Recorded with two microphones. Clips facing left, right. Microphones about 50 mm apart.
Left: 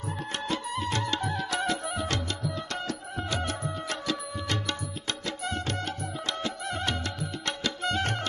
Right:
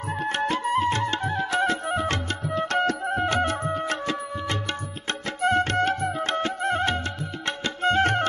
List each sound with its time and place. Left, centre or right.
0.2 s music: right